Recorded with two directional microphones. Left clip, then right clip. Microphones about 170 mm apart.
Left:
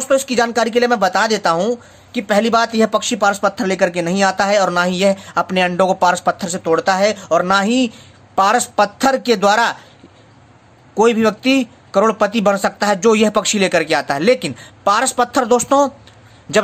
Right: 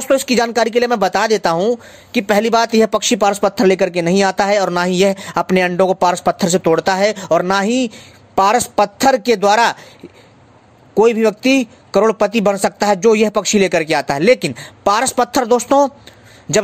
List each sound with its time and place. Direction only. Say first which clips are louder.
0.0 s a woman's voice: right 1 dB; 45° right (ahead or behind)
11.0 s a man's voice: right 1 dB; 30° right (ahead or behind)
16.5 s a man's voice: even; 20° right (ahead or behind)